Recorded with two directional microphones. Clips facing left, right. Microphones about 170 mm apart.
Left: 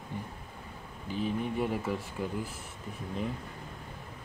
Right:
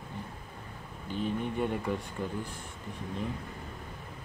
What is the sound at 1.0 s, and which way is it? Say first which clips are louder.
Speech: even; 5° left (ahead or behind).